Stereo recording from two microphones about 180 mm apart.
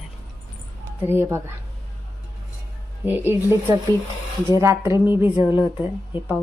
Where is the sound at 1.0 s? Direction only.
15° right (ahead or behind).